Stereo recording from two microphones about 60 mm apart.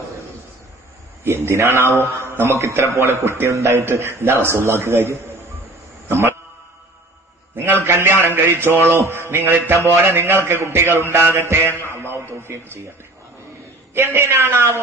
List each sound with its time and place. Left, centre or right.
1.2 s music: right
2.0 s mantra: right
2.6 s speech: right
3.3 s music: right
3.8 s music: right
6.0 s a sound: right
7.5 s a man's voice: right
8.8 s music: right
11.7 s a man's voice: right
13.9 s music: right